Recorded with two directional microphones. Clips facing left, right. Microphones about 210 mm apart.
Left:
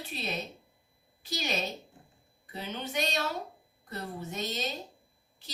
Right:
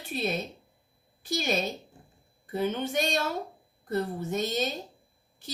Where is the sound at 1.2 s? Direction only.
50° right (ahead or behind).